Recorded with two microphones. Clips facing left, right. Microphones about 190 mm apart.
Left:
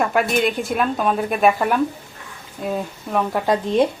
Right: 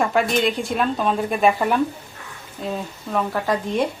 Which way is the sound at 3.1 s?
20° left (ahead or behind).